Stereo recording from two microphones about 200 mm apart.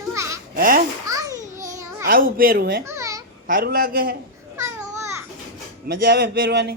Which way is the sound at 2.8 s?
15° right (ahead or behind).